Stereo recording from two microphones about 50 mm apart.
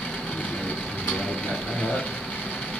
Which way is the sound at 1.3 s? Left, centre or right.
Left.